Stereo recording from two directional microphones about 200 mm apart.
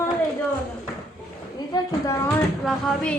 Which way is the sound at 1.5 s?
20° left (ahead or behind).